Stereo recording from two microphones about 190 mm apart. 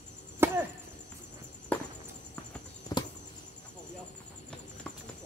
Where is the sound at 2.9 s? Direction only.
20° left (ahead or behind).